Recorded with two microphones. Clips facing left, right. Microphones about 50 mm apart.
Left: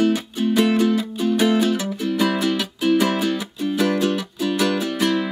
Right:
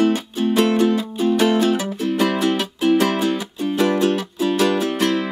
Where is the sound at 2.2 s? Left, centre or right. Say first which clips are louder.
Right 1 dB; centre.